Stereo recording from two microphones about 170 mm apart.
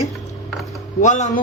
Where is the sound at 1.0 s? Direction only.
45° left (ahead or behind).